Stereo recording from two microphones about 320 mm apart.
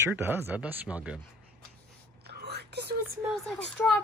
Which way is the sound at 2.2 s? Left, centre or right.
Right.